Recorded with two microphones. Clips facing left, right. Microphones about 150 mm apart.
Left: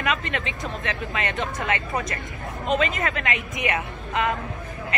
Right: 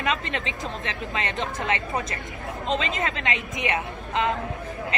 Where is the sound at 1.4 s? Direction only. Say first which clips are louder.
Left 1 dB; 30° right (ahead or behind).